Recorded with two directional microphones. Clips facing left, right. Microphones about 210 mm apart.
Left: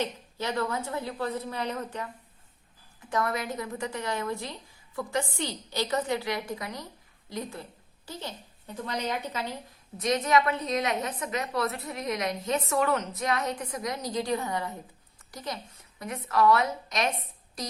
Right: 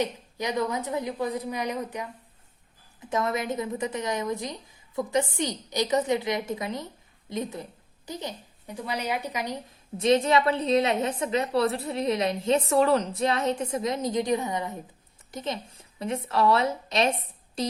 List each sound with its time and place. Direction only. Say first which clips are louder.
0.0 s a woman's voice: right 3 dB; 15° right (ahead or behind)
3.1 s a woman's voice: right 2 dB; 20° right (ahead or behind)
10.0 s a woman's voice: right 4 dB; 30° right (ahead or behind)